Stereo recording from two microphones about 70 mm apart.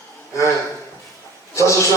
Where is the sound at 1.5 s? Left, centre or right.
Left.